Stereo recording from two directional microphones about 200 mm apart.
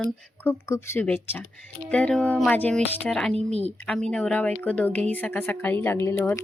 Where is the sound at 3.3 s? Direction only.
30° right (ahead or behind).